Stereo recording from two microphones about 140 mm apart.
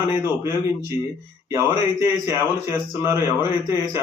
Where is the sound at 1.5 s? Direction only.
20° right (ahead or behind).